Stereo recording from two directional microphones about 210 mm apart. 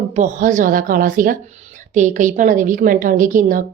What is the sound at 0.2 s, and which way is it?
Speech, 35° right (ahead or behind).